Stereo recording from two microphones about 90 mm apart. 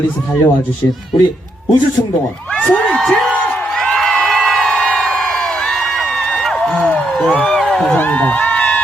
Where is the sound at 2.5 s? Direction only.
10° left (ahead or behind).